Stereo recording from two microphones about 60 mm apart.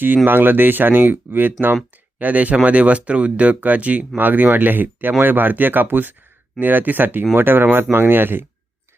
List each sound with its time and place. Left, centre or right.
0.3 s speech: right